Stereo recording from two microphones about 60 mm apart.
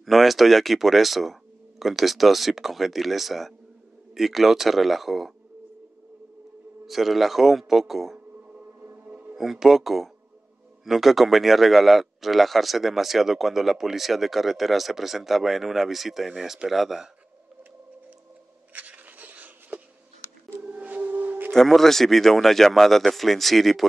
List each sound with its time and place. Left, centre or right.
0.0 s speech: centre
6.9 s speech: centre
8.8 s music: right
9.3 s speech: centre
18.7 s a sound: right
20.6 s music: right
21.5 s speech: centre